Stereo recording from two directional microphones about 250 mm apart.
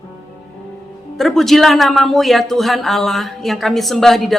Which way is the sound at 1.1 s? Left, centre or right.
Centre.